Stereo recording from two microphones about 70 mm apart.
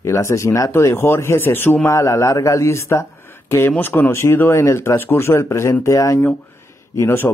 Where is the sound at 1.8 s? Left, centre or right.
Left.